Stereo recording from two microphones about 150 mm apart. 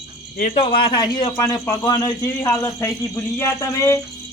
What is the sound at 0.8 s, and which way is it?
A man's voice, 30° left (ahead or behind).